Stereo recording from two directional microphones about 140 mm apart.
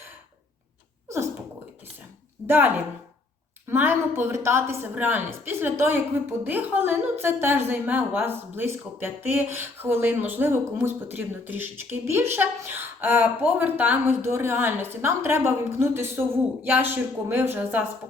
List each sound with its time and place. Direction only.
1.0 s sneeze: 20° right (ahead or behind)
2.5 s speech: 10° right (ahead or behind)